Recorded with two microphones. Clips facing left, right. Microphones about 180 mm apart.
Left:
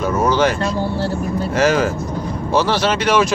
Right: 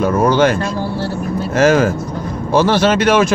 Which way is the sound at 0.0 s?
55° right (ahead or behind).